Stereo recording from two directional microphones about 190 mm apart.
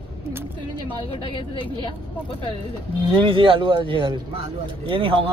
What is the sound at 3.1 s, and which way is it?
Speech, 25° right (ahead or behind).